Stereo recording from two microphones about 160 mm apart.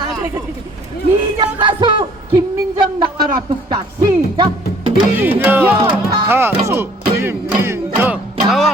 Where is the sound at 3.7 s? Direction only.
25° right (ahead or behind).